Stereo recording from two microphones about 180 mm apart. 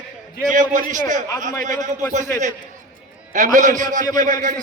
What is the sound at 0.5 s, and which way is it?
Speech, 45° right (ahead or behind).